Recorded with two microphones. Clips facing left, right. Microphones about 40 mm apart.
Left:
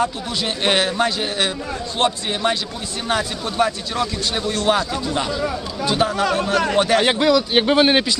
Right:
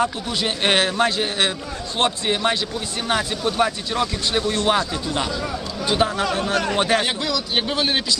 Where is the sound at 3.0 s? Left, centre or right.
Right.